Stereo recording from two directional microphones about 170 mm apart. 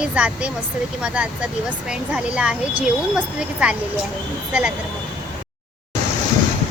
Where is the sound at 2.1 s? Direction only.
5° right (ahead or behind).